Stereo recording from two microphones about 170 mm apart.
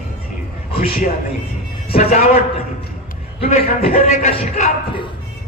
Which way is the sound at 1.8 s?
40° left (ahead or behind).